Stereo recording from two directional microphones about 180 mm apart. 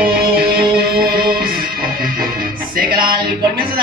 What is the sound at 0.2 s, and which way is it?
Music, 60° right (ahead or behind).